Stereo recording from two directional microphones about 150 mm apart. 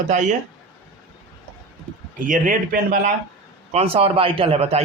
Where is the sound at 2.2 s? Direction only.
60° right (ahead or behind).